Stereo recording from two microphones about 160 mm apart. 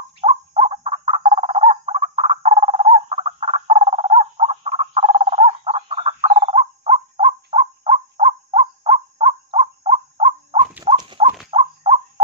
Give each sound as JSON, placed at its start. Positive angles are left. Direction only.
{"t": 0.2, "sound": "bird", "side_deg": -40}
{"t": 10.8, "sound": "horse", "side_deg": -25}
{"t": 11.5, "sound": "crow", "side_deg": -35}